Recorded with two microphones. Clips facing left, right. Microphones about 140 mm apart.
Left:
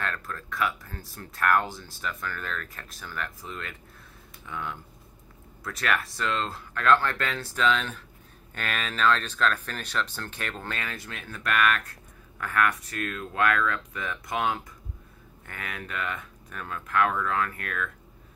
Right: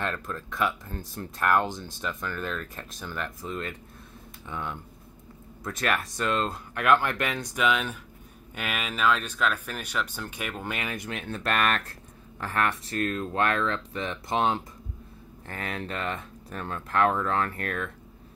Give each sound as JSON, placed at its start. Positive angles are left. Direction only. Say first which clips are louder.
{"t": 0.0, "sound": "speech", "louder": "right 2 dB", "side_deg": -20}